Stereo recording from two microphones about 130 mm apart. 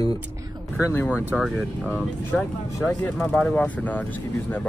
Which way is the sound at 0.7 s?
20° left (ahead or behind).